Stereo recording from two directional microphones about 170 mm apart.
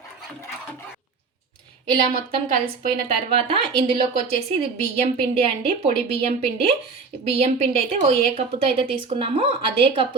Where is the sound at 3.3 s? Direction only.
30° right (ahead or behind).